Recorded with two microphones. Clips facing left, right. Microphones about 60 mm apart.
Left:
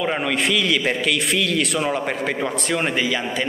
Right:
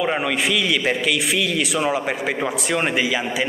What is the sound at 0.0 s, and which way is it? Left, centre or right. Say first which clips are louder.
A man's voice: right 1 dB; centre.